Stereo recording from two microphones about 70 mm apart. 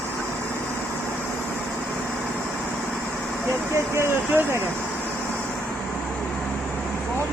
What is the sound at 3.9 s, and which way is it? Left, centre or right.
Vehicle, right.